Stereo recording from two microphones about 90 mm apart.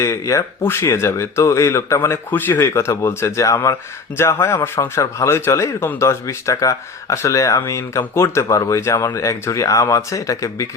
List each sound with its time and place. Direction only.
0.0 s speech: 35° left (ahead or behind)